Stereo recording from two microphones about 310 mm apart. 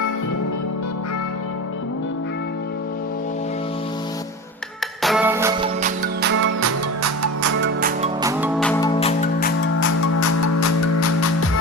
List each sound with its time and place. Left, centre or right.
5.0 s music: centre
6.2 s music: right
7.8 s music: right
8.2 s music: centre
8.5 s music: centre
10.2 s music: left